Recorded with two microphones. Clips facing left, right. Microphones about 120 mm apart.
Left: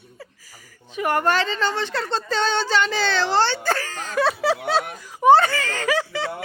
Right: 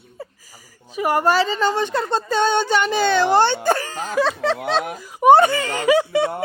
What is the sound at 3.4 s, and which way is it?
Wail, 15° right (ahead or behind).